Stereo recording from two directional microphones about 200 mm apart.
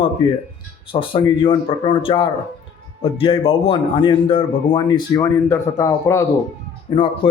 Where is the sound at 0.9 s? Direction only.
25° left (ahead or behind).